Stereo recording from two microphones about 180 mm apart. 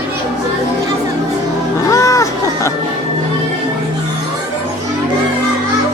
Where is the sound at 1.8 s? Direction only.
15° left (ahead or behind).